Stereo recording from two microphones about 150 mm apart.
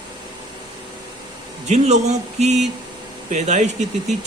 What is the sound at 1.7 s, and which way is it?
A man's voice, 50° right (ahead or behind).